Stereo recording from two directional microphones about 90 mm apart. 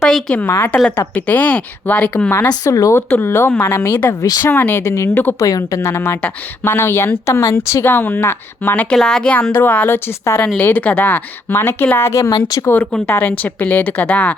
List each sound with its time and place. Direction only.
0.0 s speech: 10° left (ahead or behind)
2.5 s speech: 40° left (ahead or behind)
3.2 s speech: 30° left (ahead or behind)
4.2 s speech: 45° left (ahead or behind)
4.4 s speech: 25° left (ahead or behind)
5.4 s speech: 40° left (ahead or behind)
12.6 s speech: 20° left (ahead or behind)